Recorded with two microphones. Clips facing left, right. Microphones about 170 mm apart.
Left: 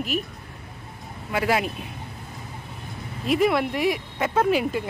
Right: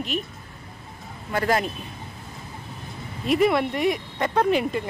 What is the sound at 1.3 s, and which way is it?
Speech, 5° left (ahead or behind).